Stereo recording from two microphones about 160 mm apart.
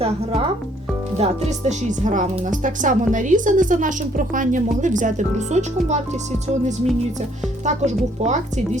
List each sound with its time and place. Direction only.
1.2 s speech: 45° right (ahead or behind)
7.6 s speech: 45° right (ahead or behind)